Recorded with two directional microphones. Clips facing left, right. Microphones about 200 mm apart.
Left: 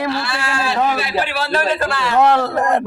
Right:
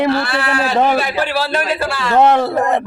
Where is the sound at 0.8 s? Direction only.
30° right (ahead or behind).